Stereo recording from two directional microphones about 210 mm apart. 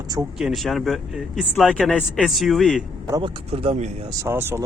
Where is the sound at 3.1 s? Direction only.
20° right (ahead or behind).